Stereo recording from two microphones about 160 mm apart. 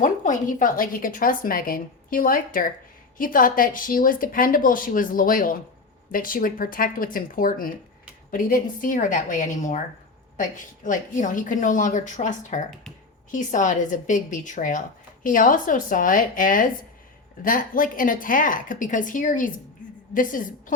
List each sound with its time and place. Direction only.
0.0 s a woman's voice: 55° left (ahead or behind)